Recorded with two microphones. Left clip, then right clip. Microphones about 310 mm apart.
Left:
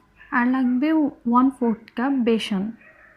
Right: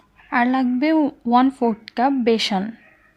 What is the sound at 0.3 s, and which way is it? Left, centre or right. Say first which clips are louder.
A woman's voice: right 3 dB; centre.